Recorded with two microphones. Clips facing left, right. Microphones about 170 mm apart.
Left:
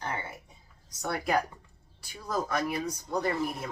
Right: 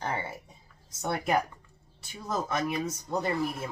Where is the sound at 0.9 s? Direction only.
25° right (ahead or behind).